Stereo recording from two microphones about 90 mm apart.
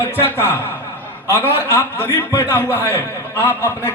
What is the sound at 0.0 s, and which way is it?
A man's voice, 25° left (ahead or behind).